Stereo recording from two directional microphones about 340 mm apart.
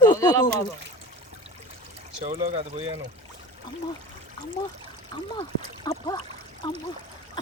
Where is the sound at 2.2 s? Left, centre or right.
Centre.